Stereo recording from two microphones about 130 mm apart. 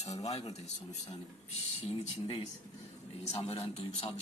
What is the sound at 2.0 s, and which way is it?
A man's voice, 50° left (ahead or behind).